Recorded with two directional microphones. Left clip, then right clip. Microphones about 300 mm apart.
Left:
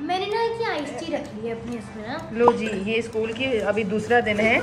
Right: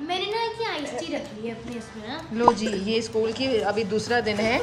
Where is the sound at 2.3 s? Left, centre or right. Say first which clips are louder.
Left 1 dB; centre.